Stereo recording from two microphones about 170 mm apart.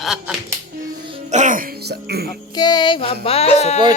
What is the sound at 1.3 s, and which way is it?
Speech, 50° right (ahead or behind).